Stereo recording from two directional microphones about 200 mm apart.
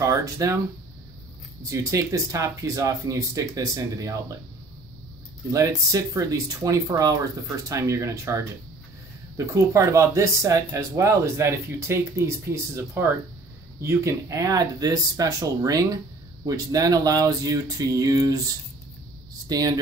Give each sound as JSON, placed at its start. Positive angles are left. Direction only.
{"t": 0.0, "sound": "speech", "side_deg": -15}
{"t": 1.6, "sound": "speech", "side_deg": -15}
{"t": 5.5, "sound": "speech", "side_deg": -15}
{"t": 9.5, "sound": "speech", "side_deg": -15}
{"t": 19.5, "sound": "speech", "side_deg": -20}